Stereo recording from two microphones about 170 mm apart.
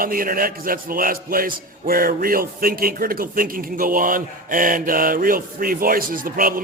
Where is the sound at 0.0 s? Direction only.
55° right (ahead or behind).